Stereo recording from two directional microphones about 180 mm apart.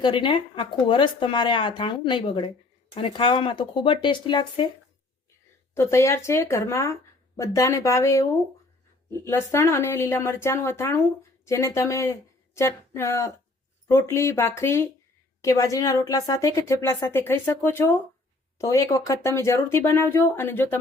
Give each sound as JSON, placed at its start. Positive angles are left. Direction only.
{"t": 0.0, "sound": "speech", "side_deg": 25}
{"t": 5.7, "sound": "a woman's voice", "side_deg": 15}